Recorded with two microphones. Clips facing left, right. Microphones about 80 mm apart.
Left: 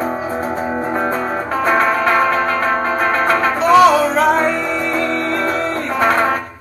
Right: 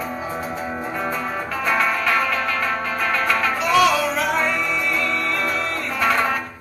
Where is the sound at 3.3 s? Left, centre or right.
Left.